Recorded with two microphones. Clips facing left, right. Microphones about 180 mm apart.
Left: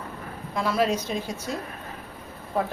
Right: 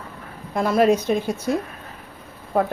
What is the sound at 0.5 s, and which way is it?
Speech, 50° right (ahead or behind).